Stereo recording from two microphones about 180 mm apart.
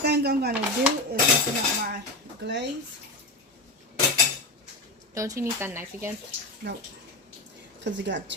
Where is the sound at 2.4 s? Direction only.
70° right (ahead or behind).